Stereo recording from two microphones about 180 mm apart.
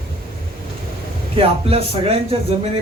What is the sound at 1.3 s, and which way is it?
A man's voice, 30° right (ahead or behind).